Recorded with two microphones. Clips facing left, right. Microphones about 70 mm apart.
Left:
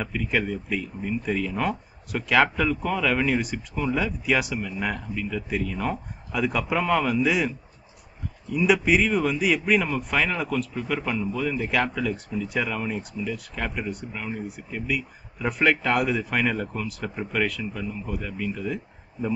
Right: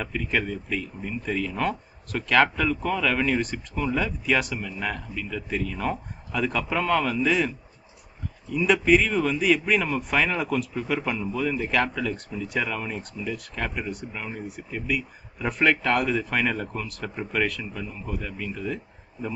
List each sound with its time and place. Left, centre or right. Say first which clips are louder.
0.0 s speech: left 1 dB; centre
8.5 s speech: right 1 dB; centre